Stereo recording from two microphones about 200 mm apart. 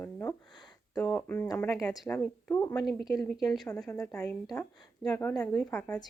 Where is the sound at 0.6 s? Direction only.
20° left (ahead or behind).